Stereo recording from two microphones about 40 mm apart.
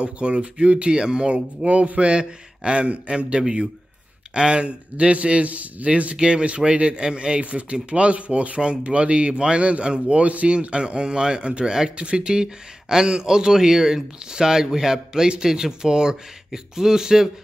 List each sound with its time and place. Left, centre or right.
0.0 s speech: right
6.1 s speech: right